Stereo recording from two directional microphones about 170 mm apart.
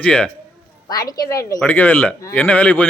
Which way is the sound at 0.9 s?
20° left (ahead or behind).